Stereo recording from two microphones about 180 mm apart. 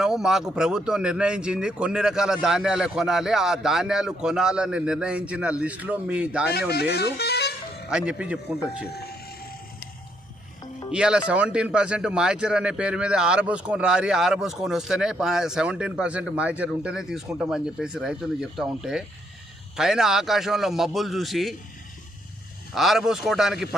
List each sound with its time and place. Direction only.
0.0 s speech: 5° right (ahead or behind)
6.5 s speech: 65° left (ahead or behind)
7.9 s speech: 5° right (ahead or behind)
10.9 s speech: 5° right (ahead or behind)
22.7 s speech: centre (ahead or behind)